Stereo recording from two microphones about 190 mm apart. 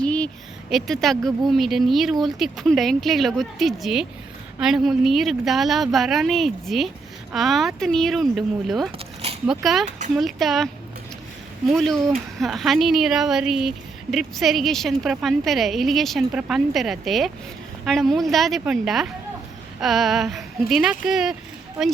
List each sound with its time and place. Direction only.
0.0 s a sound: 5° left (ahead or behind)
0.7 s a woman's voice: centre (ahead or behind)
9.0 s keys jangling: 30° right (ahead or behind)
10.2 s a woman's voice: centre (ahead or behind)
11.7 s a woman's voice: centre (ahead or behind)